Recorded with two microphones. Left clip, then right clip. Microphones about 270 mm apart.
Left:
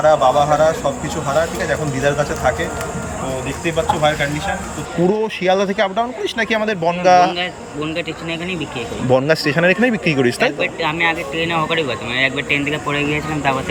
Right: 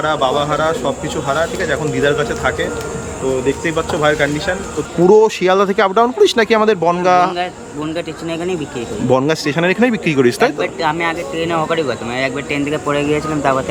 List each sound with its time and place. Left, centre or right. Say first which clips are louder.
0.0 s speech: left 3 dB; centre
3.8 s speech: even; centre
9.0 s speech: even; centre